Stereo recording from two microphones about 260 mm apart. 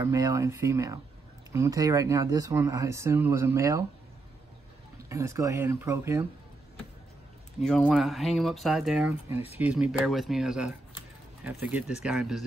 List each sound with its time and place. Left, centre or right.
0.0 s speech: centre
5.1 s speech: centre
7.6 s speech: centre
9.3 s speech: left
9.6 s speech: centre